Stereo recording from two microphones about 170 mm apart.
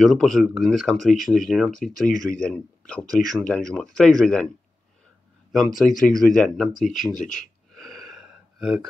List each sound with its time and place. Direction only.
0.0 s speech: centre (ahead or behind)
5.5 s speech: centre (ahead or behind)
7.3 s gasp: centre (ahead or behind)